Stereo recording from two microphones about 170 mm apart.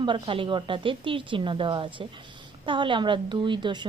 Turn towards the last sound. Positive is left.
turn(degrees=-30)  # may be behind; listen again after turning